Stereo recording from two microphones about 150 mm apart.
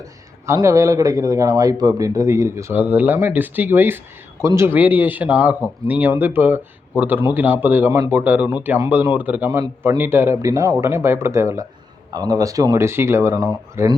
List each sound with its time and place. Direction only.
0.0 s speech: 20° right (ahead or behind)